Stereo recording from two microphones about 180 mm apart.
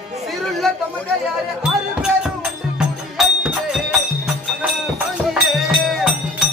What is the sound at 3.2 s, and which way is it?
Music, 5° right (ahead or behind).